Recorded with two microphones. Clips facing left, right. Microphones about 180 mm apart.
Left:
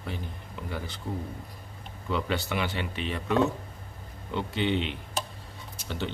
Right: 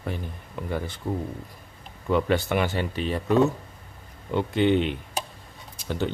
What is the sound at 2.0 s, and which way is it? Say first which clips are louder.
Speech: right 7 dB; 50° right (ahead or behind).